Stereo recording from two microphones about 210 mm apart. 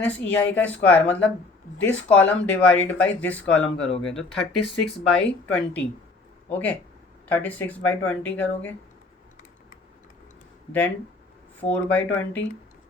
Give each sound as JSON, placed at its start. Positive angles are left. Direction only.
{"t": 0.0, "sound": "speech", "side_deg": 5}
{"t": 11.6, "sound": "speech", "side_deg": 5}